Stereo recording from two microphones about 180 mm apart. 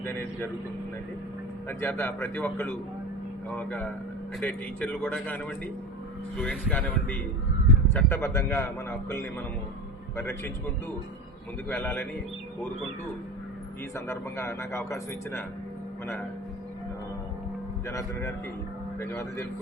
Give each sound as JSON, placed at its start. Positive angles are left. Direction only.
{"t": 0.0, "sound": "speech", "side_deg": 10}
{"t": 1.6, "sound": "a man's voice", "side_deg": 10}
{"t": 11.7, "sound": "speech", "side_deg": 10}
{"t": 13.9, "sound": "speech", "side_deg": 15}
{"t": 17.8, "sound": "speech", "side_deg": 15}